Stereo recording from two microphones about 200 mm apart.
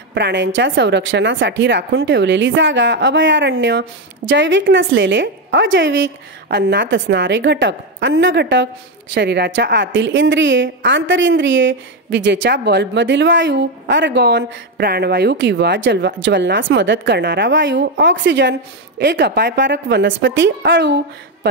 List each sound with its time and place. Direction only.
0.1 s a woman's voice: 60° right (ahead or behind)